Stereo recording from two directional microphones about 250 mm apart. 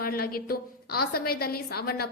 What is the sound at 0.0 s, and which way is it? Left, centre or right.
A woman's voice, left.